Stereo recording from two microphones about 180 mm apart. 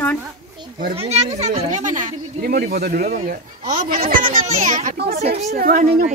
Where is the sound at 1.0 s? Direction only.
35° right (ahead or behind).